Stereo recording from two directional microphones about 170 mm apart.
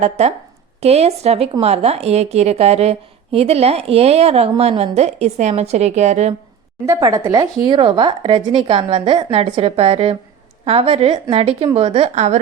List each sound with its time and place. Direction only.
0.0 s a woman's voice: 40° right (ahead or behind)
6.8 s a woman's voice: 20° right (ahead or behind); by 12.4 s 40° right (ahead or behind)